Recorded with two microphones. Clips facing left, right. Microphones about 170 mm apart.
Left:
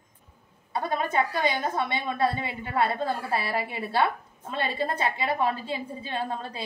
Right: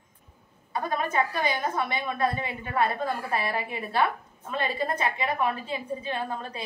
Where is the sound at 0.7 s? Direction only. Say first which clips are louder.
Left 1 dB; 25° left (ahead or behind).